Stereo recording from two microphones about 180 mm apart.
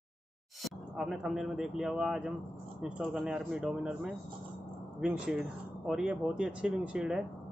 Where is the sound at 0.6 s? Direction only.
Centre (ahead or behind).